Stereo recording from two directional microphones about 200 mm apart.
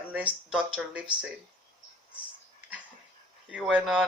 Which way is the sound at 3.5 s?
5° right (ahead or behind).